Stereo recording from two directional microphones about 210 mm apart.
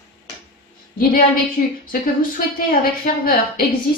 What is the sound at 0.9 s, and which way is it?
Speech, 40° left (ahead or behind).